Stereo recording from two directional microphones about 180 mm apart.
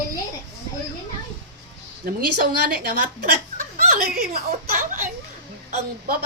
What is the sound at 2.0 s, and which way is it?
A woman's voice, 55° right (ahead or behind).